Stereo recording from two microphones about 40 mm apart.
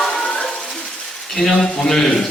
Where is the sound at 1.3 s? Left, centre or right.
Centre.